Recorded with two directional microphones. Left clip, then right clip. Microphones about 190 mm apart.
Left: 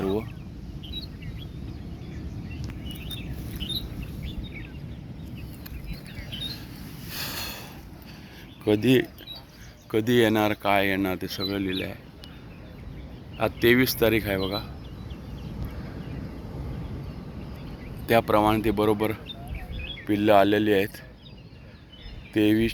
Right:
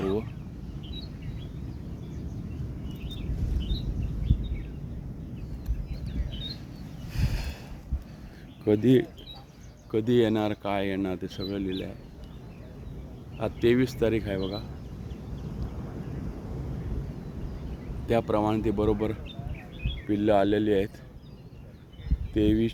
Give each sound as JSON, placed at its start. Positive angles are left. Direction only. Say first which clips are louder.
{"t": 0.8, "sound": "chirp", "louder": "left 6 dB", "side_deg": -25}
{"t": 3.2, "sound": "a sound", "louder": "left 3 dB", "side_deg": -25}
{"t": 5.9, "sound": "a sound", "louder": "left 4 dB", "side_deg": 5}
{"t": 7.1, "sound": "a sound", "louder": "left 6 dB", "side_deg": -15}
{"t": 8.6, "sound": "speech", "louder": "left 1 dB", "side_deg": -20}
{"t": 9.9, "sound": "speech", "louder": "left 3 dB", "side_deg": 0}
{"t": 13.4, "sound": "speech", "louder": "left 4 dB", "side_deg": 5}
{"t": 18.0, "sound": "speech", "louder": "left 5 dB", "side_deg": 5}
{"t": 22.4, "sound": "speech", "louder": "left 3 dB", "side_deg": 5}